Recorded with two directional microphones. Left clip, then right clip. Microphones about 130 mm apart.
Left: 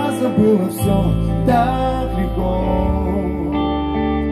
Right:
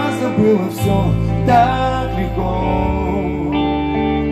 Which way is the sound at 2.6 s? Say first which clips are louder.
Right 2 dB; 10° left (ahead or behind).